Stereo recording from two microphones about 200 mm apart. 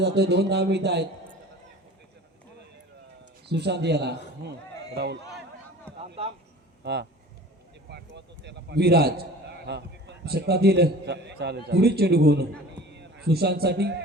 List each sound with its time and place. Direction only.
0.0 s a man's voice: 55° right (ahead or behind)
3.5 s a man's voice: 55° right (ahead or behind)
6.8 s a man's voice: 55° right (ahead or behind)
7.9 s a sound: 55° right (ahead or behind)
9.6 s a man's voice: 55° right (ahead or behind)